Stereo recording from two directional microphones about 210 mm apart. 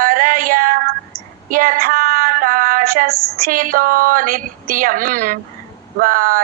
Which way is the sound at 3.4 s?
40° right (ahead or behind).